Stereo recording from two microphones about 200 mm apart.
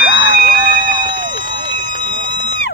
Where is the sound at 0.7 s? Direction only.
25° right (ahead or behind).